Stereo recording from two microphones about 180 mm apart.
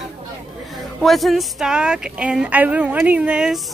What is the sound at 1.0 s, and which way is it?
A woman's voice, centre (ahead or behind).